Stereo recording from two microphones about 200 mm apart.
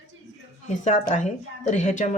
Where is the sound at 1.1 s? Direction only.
35° left (ahead or behind).